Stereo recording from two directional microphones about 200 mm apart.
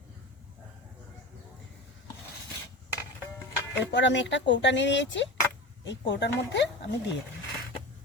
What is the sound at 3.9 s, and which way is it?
Speech, 65° left (ahead or behind).